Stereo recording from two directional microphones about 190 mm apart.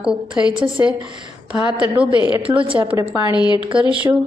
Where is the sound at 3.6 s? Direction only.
25° right (ahead or behind).